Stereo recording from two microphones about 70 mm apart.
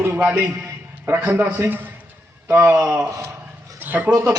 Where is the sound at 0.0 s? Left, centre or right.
Right.